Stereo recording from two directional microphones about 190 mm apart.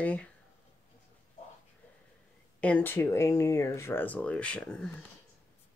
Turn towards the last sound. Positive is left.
turn(degrees=5)  # may be behind; listen again after turning